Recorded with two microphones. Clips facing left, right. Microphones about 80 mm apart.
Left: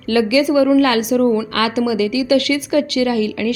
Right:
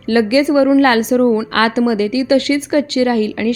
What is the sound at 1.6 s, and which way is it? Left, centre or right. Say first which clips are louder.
A woman's voice: right 3 dB; right.